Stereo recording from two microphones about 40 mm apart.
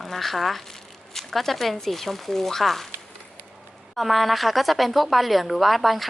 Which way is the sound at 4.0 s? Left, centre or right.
Centre.